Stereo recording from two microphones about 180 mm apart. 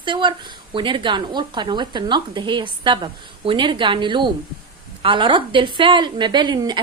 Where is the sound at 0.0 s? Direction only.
25° right (ahead or behind).